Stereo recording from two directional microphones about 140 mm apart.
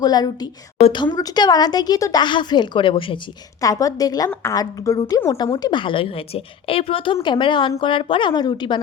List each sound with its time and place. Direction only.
0.0 s a woman's voice: 30° left (ahead or behind)
3.6 s a woman's voice: 25° left (ahead or behind)